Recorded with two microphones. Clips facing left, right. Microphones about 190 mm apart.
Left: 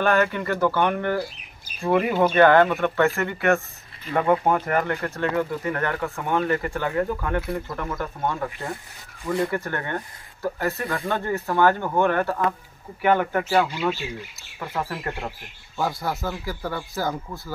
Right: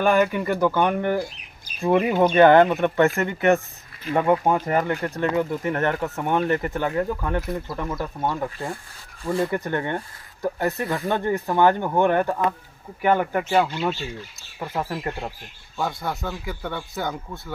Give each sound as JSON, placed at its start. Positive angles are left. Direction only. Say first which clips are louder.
{"t": 0.0, "sound": "speech", "louder": "right 2 dB", "side_deg": -10}
{"t": 9.2, "sound": "speech", "louder": "right 1 dB", "side_deg": -25}
{"t": 13.7, "sound": "a man's voice", "louder": "even", "side_deg": 5}
{"t": 14.7, "sound": "speech", "louder": "right 1 dB", "side_deg": -15}
{"t": 15.8, "sound": "a man's voice", "louder": "left 1 dB", "side_deg": 0}